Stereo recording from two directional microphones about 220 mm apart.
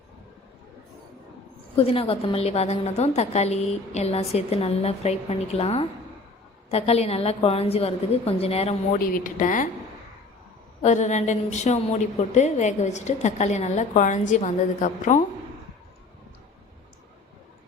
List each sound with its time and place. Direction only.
1.7 s a woman's voice: 25° left (ahead or behind)
8.9 s a woman's voice: 40° left (ahead or behind)
10.8 s a woman's voice: 30° left (ahead or behind)